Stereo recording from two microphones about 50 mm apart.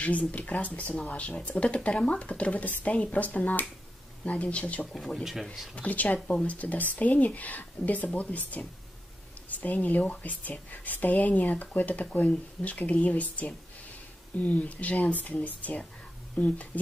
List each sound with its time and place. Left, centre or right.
0.0 s speech: left
4.9 s speech: centre
5.8 s speech: left